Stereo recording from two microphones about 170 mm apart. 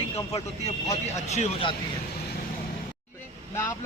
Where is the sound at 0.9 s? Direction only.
40° left (ahead or behind).